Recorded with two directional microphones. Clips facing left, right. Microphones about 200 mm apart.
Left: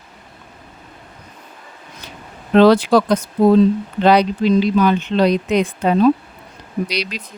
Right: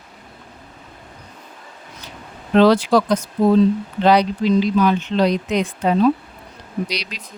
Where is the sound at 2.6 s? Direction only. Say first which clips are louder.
Left 2 dB; 60° left (ahead or behind).